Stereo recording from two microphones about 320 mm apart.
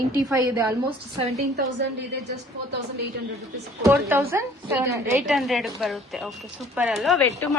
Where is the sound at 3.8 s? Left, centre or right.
Centre.